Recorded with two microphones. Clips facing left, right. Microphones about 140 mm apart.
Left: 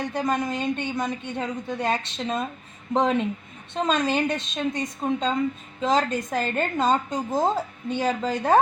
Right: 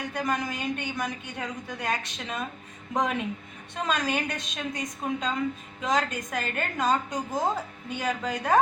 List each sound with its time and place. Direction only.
0.0 s a woman's voice: 30° left (ahead or behind)